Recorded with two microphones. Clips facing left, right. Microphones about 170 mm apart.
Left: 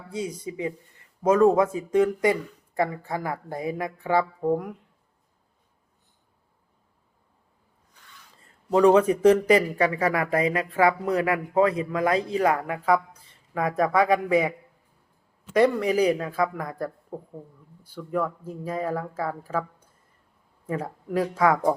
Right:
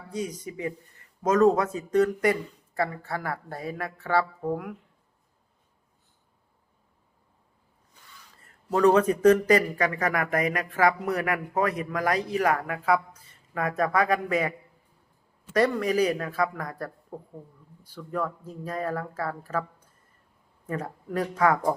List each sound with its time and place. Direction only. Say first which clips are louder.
0.3 s speech: left 2 dB; 15° left (ahead or behind)
8.7 s speech: left 3 dB; 10° left (ahead or behind)
9.7 s speech: left 3 dB; 30° left (ahead or behind)
13.5 s speech: left 3 dB; 15° left (ahead or behind)
15.5 s speech: left 3 dB; 10° left (ahead or behind)